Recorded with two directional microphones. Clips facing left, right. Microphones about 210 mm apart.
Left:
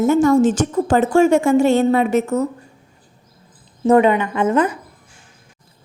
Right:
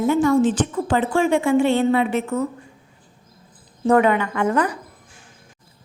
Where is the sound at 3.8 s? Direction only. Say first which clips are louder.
Left 3 dB; 20° left (ahead or behind).